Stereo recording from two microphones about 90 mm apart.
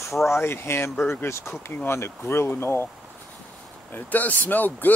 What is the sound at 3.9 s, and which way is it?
Speech, 20° left (ahead or behind).